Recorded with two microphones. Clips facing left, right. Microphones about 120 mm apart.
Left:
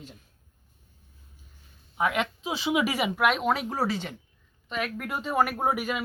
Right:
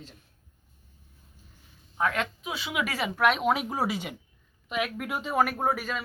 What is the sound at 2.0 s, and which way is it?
Speech, 10° left (ahead or behind).